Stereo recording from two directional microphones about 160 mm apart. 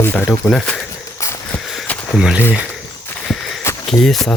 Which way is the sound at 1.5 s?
Centre (ahead or behind).